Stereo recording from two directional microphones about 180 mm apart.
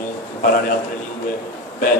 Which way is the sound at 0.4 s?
50° left (ahead or behind).